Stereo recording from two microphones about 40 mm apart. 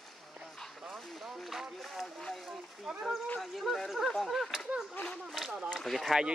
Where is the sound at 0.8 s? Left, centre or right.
Centre.